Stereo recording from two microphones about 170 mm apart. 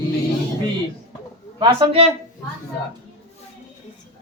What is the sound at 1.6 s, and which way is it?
Speech, 25° right (ahead or behind).